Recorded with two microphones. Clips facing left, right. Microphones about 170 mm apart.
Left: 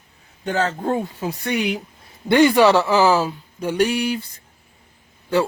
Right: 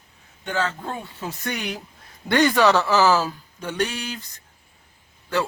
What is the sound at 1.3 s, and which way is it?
Speech, 10° left (ahead or behind).